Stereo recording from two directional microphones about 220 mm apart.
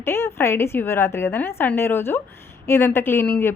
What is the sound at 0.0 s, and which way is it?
A woman's voice, 10° left (ahead or behind).